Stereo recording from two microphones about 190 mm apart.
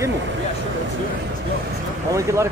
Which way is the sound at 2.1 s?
15° right (ahead or behind).